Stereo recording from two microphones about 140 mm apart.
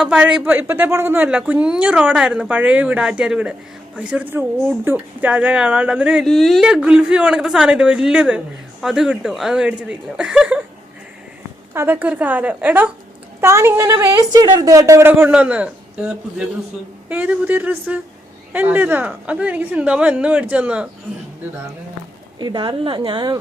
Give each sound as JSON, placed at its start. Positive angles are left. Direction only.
{"t": 0.0, "sound": "speech", "side_deg": -5}
{"t": 11.7, "sound": "a woman's voice", "side_deg": -15}
{"t": 22.4, "sound": "a woman's voice", "side_deg": -30}